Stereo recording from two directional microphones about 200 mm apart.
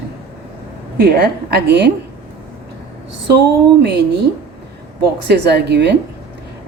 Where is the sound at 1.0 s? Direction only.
55° right (ahead or behind).